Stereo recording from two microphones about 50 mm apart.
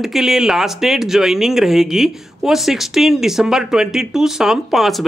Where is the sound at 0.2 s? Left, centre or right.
Centre.